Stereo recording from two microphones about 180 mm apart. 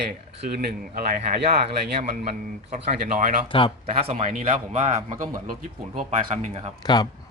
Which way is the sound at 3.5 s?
30° left (ahead or behind).